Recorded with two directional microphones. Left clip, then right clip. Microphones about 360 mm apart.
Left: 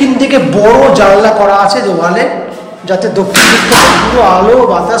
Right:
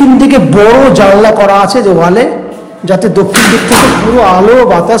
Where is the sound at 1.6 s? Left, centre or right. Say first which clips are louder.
Right 3 dB; centre.